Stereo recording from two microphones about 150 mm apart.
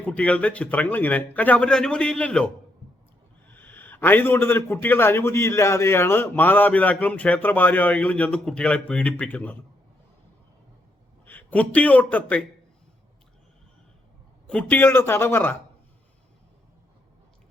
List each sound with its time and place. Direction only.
0.0 s a man's voice: 10° left (ahead or behind)
11.3 s a man's voice: 10° left (ahead or behind)
14.4 s a man's voice: 10° left (ahead or behind)